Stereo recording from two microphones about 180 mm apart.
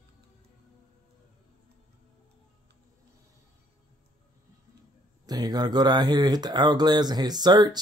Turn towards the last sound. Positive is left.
turn(degrees=-25)  # may be behind; listen again after turning